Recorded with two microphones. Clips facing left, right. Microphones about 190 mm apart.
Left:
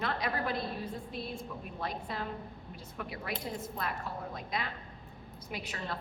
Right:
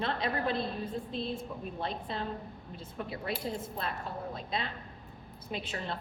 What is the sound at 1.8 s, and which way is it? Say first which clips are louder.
A woman's voice: right 1 dB; 25° right (ahead or behind).